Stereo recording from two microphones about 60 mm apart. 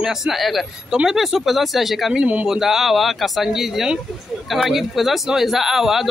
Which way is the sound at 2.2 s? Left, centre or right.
Right.